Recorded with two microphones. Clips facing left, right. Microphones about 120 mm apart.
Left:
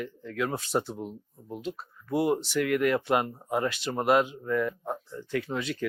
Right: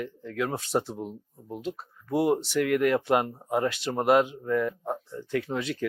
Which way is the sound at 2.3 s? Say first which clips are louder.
Right 3 dB; 40° right (ahead or behind).